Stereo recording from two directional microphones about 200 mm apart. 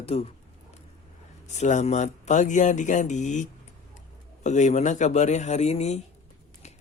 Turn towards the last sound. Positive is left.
turn(degrees=35)  # may be behind; listen again after turning